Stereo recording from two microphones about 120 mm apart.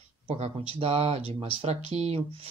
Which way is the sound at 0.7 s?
55° right (ahead or behind).